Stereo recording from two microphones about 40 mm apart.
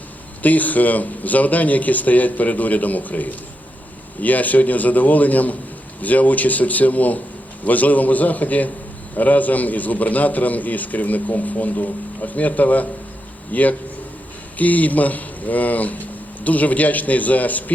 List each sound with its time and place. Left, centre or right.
0.4 s a man's voice: left